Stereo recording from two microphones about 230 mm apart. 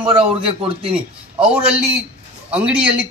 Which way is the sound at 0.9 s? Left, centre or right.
Centre.